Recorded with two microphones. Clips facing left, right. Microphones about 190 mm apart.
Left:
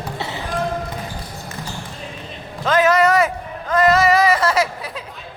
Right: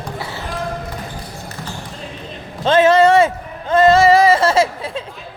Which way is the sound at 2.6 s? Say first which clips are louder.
Right 4 dB; 30° right (ahead or behind).